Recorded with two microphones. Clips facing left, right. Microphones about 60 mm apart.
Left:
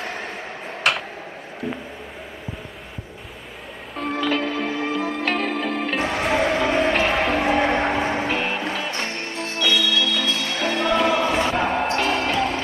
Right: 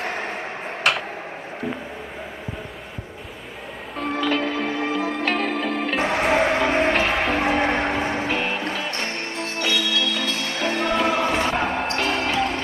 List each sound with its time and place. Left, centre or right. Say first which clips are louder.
0.2 s tick-tock: right 3 dB; right
3.9 s music: even; centre
6.0 s a sound: right 2 dB; centre
6.9 s music: left 1 dB; centre
7.8 s music: left 1 dB; centre
10.7 s music: left 2 dB; centre
11.3 s basketball bounce: left 1 dB; centre